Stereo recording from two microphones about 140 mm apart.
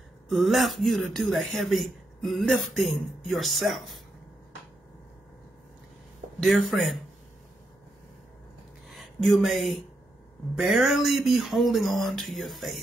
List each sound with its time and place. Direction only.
0.3 s speech: centre (ahead or behind)
6.4 s speech: centre (ahead or behind)
8.8 s a sound: centre (ahead or behind)
10.5 s speech: 5° right (ahead or behind)